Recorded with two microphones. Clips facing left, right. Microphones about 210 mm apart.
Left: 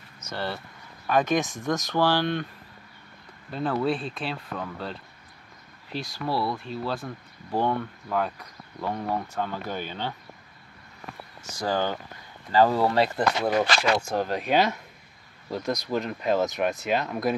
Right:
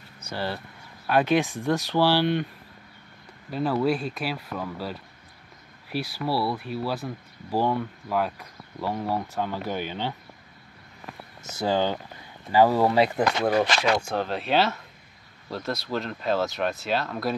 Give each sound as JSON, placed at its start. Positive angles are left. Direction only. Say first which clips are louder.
{"t": 0.3, "sound": "speech", "louder": "right 1 dB", "side_deg": -10}
{"t": 3.4, "sound": "speech", "louder": "right 2 dB", "side_deg": -5}
{"t": 11.6, "sound": "speech", "louder": "right 2 dB", "side_deg": -15}
{"t": 13.7, "sound": "speech", "louder": "even", "side_deg": 10}